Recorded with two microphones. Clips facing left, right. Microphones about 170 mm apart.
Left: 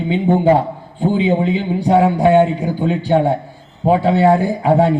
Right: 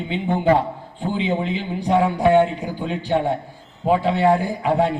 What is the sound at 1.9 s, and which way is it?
A man's voice, 30° left (ahead or behind).